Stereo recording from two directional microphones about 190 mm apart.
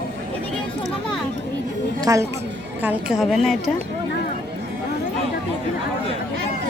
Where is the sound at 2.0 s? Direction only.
15° right (ahead or behind).